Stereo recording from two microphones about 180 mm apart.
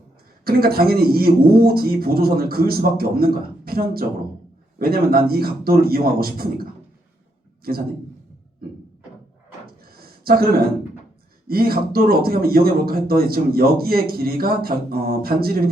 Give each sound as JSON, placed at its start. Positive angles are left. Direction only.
{"t": 0.4, "sound": "speech", "side_deg": -55}
{"t": 7.7, "sound": "speech", "side_deg": -55}
{"t": 9.8, "sound": "a sound", "side_deg": -55}
{"t": 11.4, "sound": "speech", "side_deg": -55}